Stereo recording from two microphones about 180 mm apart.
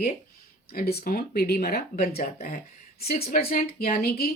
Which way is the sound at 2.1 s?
35° left (ahead or behind).